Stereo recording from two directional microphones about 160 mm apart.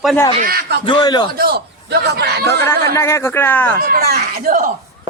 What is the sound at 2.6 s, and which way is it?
Speech, 15° left (ahead or behind).